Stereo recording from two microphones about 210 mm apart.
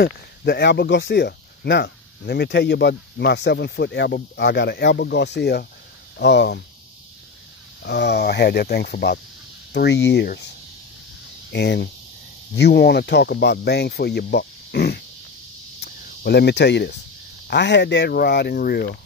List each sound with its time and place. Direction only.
0.0 s speech: 50° left (ahead or behind)
7.8 s speech: 55° left (ahead or behind)
11.5 s speech: 55° left (ahead or behind)
15.8 s cricket: 50° left (ahead or behind)
17.5 s speech: 55° left (ahead or behind)